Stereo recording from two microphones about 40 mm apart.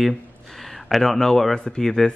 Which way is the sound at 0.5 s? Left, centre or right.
Centre.